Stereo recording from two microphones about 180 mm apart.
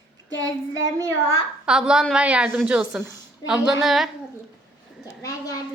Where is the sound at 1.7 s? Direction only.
5° right (ahead or behind).